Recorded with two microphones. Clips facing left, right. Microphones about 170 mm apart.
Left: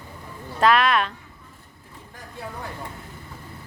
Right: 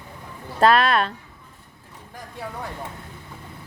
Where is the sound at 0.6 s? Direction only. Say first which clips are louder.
Right 2 dB; 30° right (ahead or behind).